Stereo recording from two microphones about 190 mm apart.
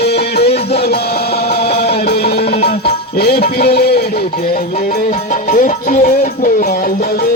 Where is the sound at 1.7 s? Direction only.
55° left (ahead or behind).